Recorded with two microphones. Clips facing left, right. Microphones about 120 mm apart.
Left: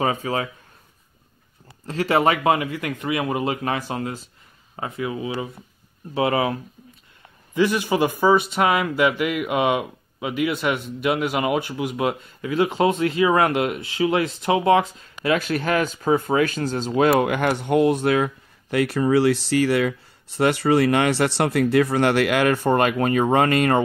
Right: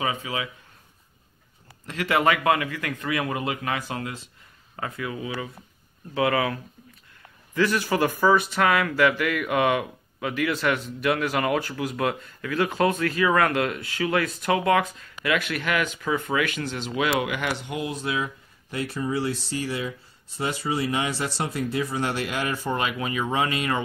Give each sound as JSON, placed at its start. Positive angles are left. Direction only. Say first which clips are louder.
{"t": 0.0, "sound": "speech", "louder": "left 5 dB", "side_deg": 40}
{"t": 1.9, "sound": "a man's voice", "louder": "left 3 dB", "side_deg": 30}